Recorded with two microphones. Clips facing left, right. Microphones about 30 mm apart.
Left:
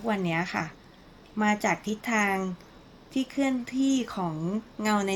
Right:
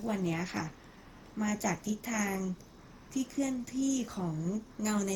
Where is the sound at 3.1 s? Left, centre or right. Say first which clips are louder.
Left 6 dB; left.